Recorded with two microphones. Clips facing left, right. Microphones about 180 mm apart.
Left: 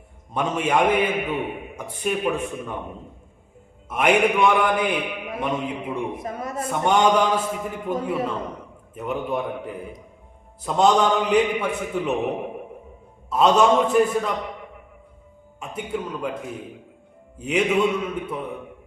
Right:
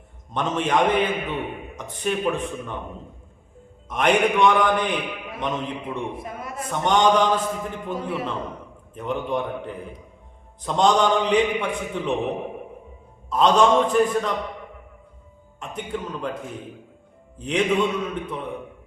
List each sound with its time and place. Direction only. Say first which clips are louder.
0.3 s a man's voice: even; 10° left (ahead or behind)
3.8 s a man's voice: left 1 dB; 5° left (ahead or behind)
6.2 s a man's voice: left 4 dB; 40° left (ahead or behind)
6.7 s a man's voice: even; 10° left (ahead or behind)
13.3 s a man's voice: even; 5° left (ahead or behind)
15.6 s a man's voice: left 1 dB; 5° left (ahead or behind)
17.3 s a man's voice: left 1 dB; 5° left (ahead or behind)